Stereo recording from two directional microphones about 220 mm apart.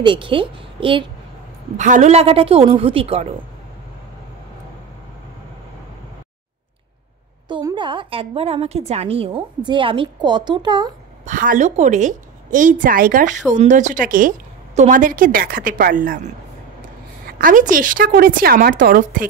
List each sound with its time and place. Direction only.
0.0 s a woman's voice: 20° right (ahead or behind)
1.8 s a woman's voice: 35° right (ahead or behind)
7.4 s a woman's voice: 20° right (ahead or behind)
11.2 s a woman's voice: 35° right (ahead or behind)
17.3 s a woman's voice: 40° right (ahead or behind)